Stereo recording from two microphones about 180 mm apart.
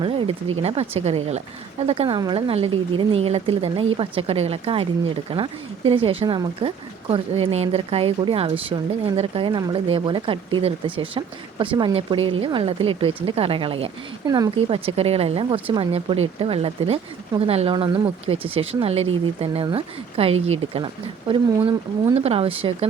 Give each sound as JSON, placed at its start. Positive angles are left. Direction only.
{"t": 0.6, "sound": "a woman's voice", "side_deg": -35}
{"t": 14.3, "sound": "speech", "side_deg": -20}
{"t": 14.7, "sound": "a woman's voice", "side_deg": -35}